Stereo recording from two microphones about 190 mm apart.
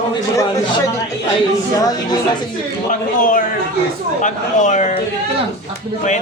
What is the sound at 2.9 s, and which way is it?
A man's voice, 45° left (ahead or behind).